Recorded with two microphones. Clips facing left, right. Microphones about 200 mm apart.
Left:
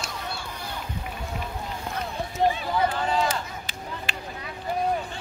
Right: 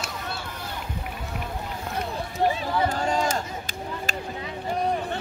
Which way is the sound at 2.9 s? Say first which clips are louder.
Right 1 dB; 45° right (ahead or behind).